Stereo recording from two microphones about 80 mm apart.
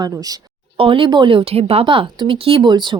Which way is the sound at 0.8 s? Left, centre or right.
Right.